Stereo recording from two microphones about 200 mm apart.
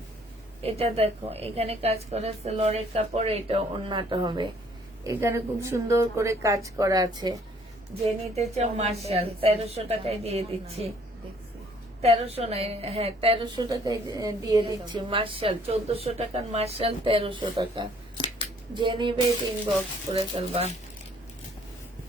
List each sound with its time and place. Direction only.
0.6 s a woman's voice: 30° right (ahead or behind)
8.4 s a woman's voice: 30° right (ahead or behind)
12.0 s a woman's voice: 30° right (ahead or behind)
18.2 s scissors: 25° left (ahead or behind)
18.7 s a woman's voice: 25° right (ahead or behind)